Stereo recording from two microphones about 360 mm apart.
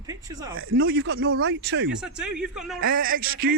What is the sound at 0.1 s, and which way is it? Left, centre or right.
Speech, centre.